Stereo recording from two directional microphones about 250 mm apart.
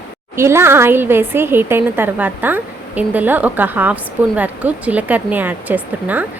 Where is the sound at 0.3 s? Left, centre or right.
Centre.